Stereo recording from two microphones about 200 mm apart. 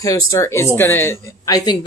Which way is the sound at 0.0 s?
15° left (ahead or behind).